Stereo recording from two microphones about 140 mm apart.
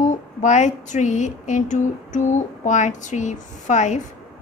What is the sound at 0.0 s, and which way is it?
Female singing, 60° left (ahead or behind).